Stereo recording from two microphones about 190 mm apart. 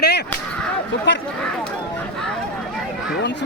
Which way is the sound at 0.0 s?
60° left (ahead or behind).